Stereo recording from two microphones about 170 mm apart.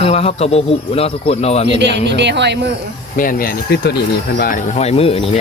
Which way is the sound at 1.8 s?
90° right.